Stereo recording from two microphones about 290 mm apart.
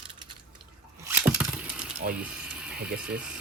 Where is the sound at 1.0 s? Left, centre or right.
Centre.